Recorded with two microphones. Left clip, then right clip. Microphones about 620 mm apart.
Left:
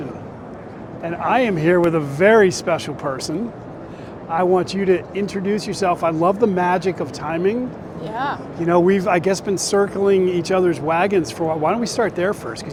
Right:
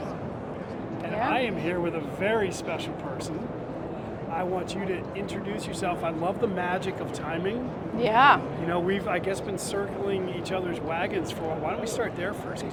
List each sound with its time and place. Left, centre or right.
1.0 s speech: left
4.4 s speech: left
8.0 s speech: right
8.6 s speech: left